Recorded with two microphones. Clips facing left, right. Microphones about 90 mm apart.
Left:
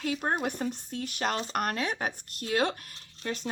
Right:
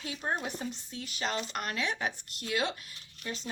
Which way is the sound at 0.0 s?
50° left (ahead or behind).